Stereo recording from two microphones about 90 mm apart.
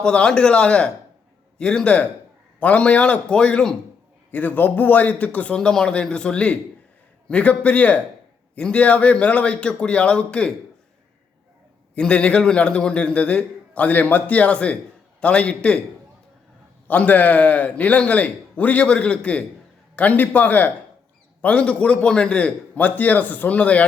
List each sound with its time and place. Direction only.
0.0 s a man's voice: 10° left (ahead or behind)
11.9 s a man's voice: 10° left (ahead or behind)
16.9 s a man's voice: 20° left (ahead or behind)